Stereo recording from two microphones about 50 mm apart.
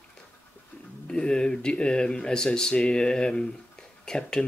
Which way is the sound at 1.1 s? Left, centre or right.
Centre.